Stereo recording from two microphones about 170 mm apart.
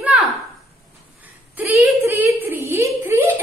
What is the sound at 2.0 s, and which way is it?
Speech, 15° right (ahead or behind).